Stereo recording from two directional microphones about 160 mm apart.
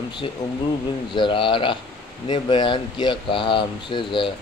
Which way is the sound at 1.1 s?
30° left (ahead or behind).